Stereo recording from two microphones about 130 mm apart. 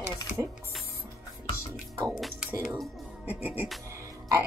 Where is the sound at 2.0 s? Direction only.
Centre (ahead or behind).